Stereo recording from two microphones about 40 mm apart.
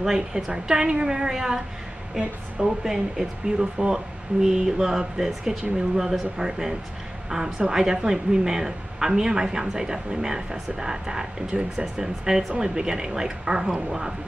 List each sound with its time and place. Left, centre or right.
0.0 s speech: centre
2.8 s speech: centre